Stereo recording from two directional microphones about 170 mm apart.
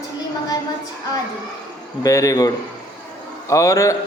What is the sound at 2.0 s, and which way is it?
A man's voice, 20° left (ahead or behind).